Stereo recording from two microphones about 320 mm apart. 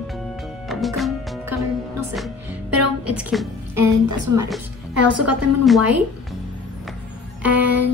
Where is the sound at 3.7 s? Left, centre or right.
Right.